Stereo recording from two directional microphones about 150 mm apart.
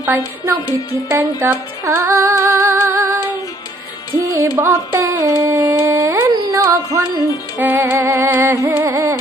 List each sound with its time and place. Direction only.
1.1 s music: 15° right (ahead or behind)
4.5 s a sound: 15° right (ahead or behind)
7.6 s music: 15° right (ahead or behind)